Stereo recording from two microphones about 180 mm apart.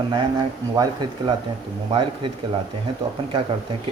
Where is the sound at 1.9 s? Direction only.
30° right (ahead or behind).